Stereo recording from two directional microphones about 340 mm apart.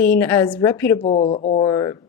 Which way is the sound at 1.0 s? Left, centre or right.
Centre.